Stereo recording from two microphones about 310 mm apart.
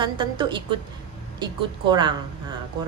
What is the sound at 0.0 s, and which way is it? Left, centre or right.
Speech, centre.